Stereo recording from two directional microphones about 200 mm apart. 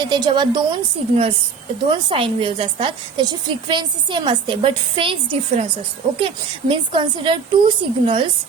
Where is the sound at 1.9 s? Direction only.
25° right (ahead or behind).